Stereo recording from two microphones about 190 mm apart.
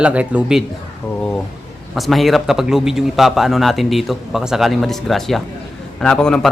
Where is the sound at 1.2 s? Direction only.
5° left (ahead or behind).